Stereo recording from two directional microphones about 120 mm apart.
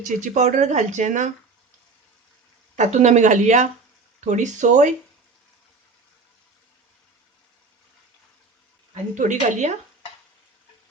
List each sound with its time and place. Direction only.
0.0 s speech: 90° right
2.7 s speech: 80° right
9.1 s speech: 90° right